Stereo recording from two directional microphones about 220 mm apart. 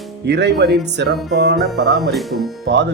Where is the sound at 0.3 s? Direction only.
50° right (ahead or behind).